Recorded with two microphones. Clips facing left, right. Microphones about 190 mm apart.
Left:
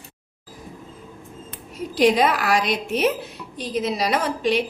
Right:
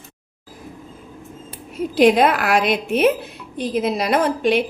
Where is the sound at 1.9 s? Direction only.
55° right (ahead or behind).